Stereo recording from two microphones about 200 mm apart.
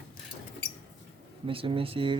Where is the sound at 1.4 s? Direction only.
25° right (ahead or behind).